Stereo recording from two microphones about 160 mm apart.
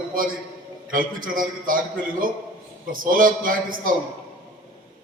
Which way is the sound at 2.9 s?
60° right (ahead or behind).